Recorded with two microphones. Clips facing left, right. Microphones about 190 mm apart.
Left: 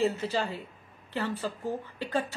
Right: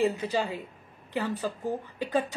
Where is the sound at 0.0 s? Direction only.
15° right (ahead or behind).